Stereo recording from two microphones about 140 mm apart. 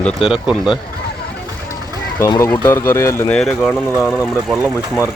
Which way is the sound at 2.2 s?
20° left (ahead or behind).